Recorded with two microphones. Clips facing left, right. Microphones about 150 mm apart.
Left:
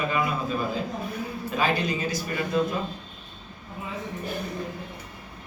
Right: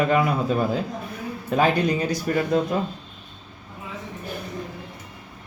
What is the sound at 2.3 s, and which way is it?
Speech, 55° right (ahead or behind).